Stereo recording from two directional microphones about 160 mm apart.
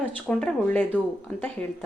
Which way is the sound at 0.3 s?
5° left (ahead or behind).